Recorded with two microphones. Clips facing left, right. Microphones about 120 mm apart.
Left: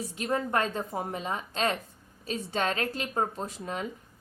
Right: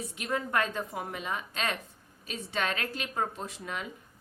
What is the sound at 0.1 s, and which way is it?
A woman's voice, 35° left (ahead or behind).